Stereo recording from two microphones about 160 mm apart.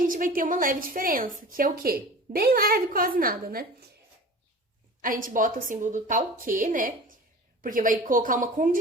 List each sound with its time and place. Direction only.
0.0 s a woman's voice: 60° right (ahead or behind)
5.0 s a woman's voice: 60° right (ahead or behind)